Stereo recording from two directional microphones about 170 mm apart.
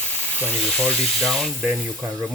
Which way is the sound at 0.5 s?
5° left (ahead or behind).